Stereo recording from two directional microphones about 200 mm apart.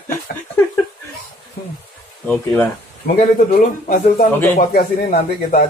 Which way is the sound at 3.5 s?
45° left (ahead or behind).